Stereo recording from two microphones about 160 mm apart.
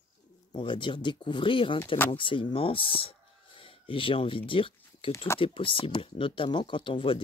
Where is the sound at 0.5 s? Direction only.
30° left (ahead or behind).